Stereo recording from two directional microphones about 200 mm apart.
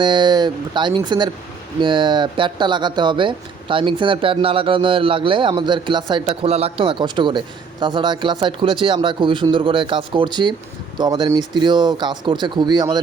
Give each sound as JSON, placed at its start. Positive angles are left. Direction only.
{"t": 0.0, "sound": "speech", "side_deg": -25}